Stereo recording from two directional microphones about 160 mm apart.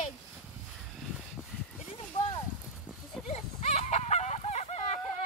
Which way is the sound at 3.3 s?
45° left (ahead or behind).